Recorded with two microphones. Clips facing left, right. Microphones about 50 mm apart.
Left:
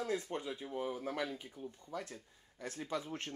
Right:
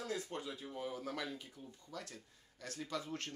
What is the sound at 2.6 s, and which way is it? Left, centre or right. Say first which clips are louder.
Speech: left 3 dB; left.